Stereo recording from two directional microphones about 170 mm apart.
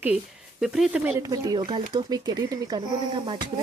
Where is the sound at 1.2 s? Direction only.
20° right (ahead or behind).